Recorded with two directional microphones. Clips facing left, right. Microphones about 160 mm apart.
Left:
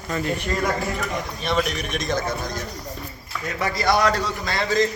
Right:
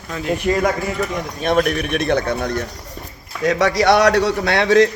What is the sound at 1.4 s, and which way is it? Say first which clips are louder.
Speech: right 8 dB; 55° right (ahead or behind).